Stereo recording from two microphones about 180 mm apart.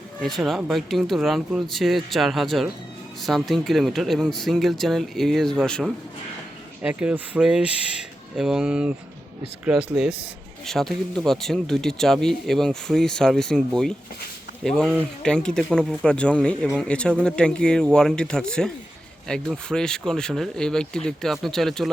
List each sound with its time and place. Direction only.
0.2 s speech: centre (ahead or behind)
6.8 s speech: 5° right (ahead or behind)